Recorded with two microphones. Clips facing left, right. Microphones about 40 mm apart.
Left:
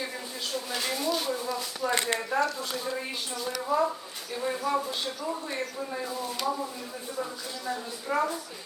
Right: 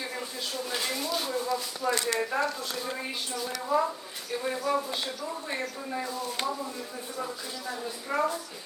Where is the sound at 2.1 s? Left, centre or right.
Centre.